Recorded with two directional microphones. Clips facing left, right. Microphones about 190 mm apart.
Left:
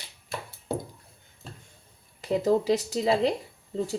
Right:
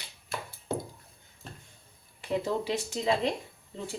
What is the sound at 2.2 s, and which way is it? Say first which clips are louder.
A woman's voice: left 6 dB; 40° left (ahead or behind).